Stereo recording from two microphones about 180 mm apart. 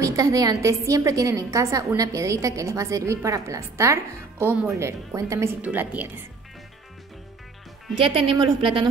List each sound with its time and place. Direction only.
0.0 s a woman's voice: 20° right (ahead or behind)
8.0 s a woman's voice: 30° right (ahead or behind)